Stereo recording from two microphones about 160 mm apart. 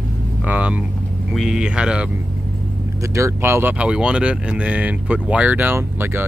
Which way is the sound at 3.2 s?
15° right (ahead or behind).